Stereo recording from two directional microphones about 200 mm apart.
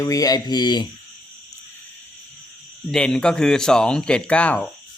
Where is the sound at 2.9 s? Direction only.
5° left (ahead or behind).